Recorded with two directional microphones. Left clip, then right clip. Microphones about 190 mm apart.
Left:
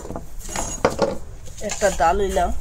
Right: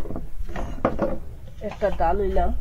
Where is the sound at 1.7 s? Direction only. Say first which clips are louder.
Left 4 dB; 25° left (ahead or behind).